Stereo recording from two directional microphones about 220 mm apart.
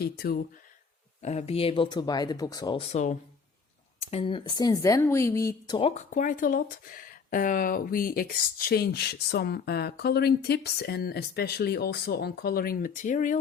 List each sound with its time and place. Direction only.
0.0 s speech: 45° left (ahead or behind)
1.2 s speech: 30° left (ahead or behind)